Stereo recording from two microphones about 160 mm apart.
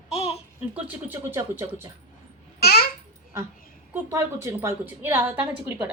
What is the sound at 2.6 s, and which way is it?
Babbling, 75° left (ahead or behind).